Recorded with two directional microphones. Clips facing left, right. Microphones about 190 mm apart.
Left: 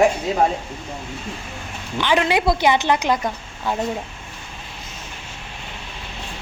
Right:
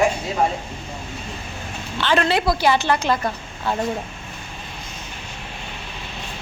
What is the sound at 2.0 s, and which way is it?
A woman's voice, 15° left (ahead or behind).